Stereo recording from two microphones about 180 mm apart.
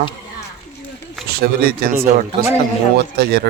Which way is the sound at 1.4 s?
60° right (ahead or behind).